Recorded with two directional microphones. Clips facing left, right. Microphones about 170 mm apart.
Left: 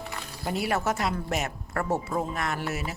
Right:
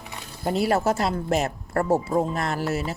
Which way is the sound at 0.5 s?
30° right (ahead or behind).